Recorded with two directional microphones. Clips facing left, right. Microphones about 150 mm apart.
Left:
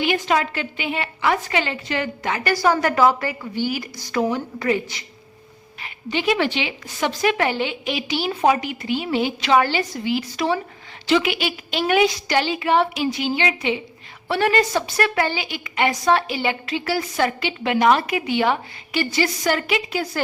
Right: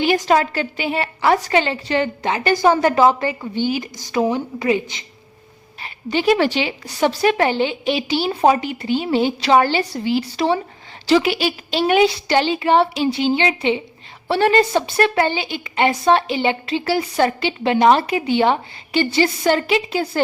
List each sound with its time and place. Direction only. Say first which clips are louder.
0.0 s a woman's voice: right 4 dB; 35° right (ahead or behind); by 5.0 s 20° right (ahead or behind)
5.8 s a woman's voice: right 4 dB; 35° right (ahead or behind)